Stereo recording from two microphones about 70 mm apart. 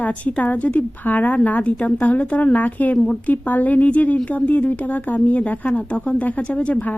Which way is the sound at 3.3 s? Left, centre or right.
Left.